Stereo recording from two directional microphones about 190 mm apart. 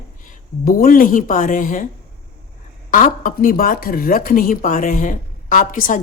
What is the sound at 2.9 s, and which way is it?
Speech, 45° left (ahead or behind).